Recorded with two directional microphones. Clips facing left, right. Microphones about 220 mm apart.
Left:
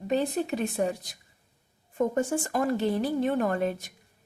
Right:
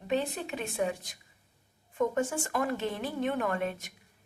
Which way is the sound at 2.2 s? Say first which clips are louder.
Left 4 dB; 35° left (ahead or behind).